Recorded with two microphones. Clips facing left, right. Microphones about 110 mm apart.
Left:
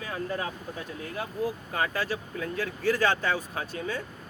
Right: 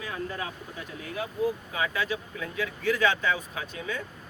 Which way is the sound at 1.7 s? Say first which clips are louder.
Even; 40° left (ahead or behind).